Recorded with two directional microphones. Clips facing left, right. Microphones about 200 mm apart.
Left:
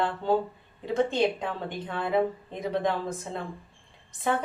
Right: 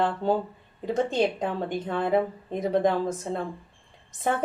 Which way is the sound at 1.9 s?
40° right (ahead or behind).